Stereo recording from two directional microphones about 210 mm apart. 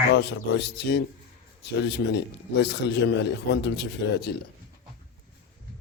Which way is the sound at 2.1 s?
55° left (ahead or behind).